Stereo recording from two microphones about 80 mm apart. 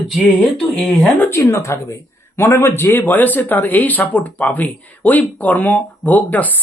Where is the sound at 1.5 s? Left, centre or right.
Left.